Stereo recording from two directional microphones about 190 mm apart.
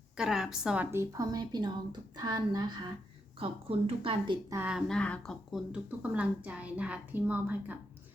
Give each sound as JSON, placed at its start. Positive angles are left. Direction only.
{"t": 0.2, "sound": "a woman's voice", "side_deg": -5}
{"t": 4.5, "sound": "a woman's voice", "side_deg": -10}
{"t": 4.9, "sound": "a woman's voice", "side_deg": 5}